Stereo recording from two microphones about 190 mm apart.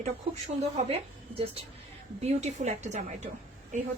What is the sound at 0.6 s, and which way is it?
Speech, 35° right (ahead or behind).